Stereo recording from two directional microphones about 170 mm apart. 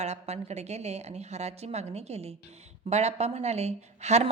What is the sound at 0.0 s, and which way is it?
A woman's voice, 40° right (ahead or behind).